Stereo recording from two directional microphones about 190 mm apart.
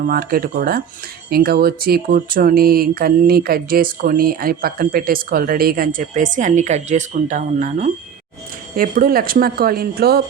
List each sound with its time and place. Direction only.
0.0 s speech: 50° right (ahead or behind)